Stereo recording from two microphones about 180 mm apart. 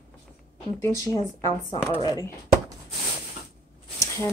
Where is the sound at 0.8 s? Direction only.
20° left (ahead or behind).